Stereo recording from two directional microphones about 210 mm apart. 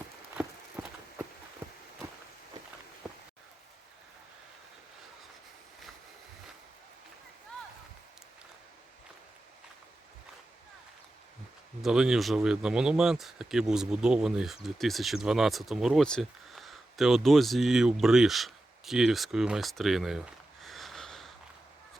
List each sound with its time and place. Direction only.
0.8 s walk: 10° right (ahead or behind)
3.1 s a sound: 5° right (ahead or behind)
11.8 s speech: 5° right (ahead or behind)